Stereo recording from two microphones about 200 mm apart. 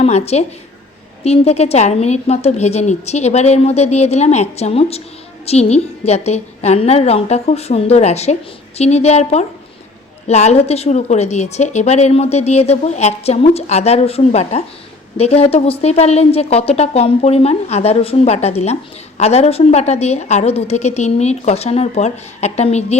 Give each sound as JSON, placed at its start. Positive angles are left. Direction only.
{"t": 0.0, "sound": "speech", "side_deg": 30}